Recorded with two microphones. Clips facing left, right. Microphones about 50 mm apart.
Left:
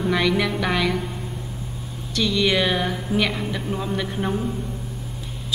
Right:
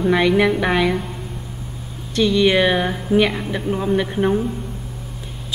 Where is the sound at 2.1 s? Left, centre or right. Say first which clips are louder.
Right 5 dB; right.